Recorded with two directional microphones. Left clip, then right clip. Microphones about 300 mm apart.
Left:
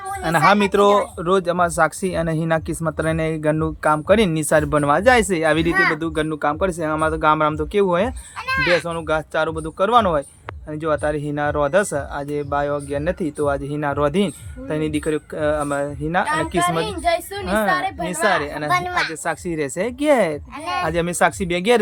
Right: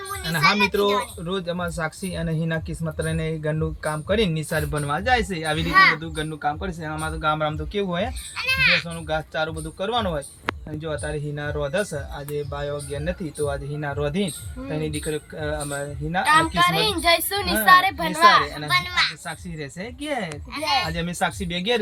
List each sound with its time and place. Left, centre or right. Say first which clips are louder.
0.3 s speech: left 4 dB; centre
8.4 s a child's voice: left 1 dB; left
8.9 s speech: left 6 dB; centre
18.7 s speech: left 1 dB; left